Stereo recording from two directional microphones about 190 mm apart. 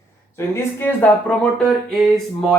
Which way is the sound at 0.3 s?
10° left (ahead or behind).